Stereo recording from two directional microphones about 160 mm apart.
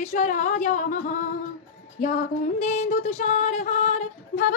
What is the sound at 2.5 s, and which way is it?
Female singing, 45° left (ahead or behind).